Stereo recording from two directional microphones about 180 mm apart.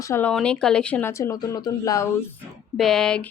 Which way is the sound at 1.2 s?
20° left (ahead or behind).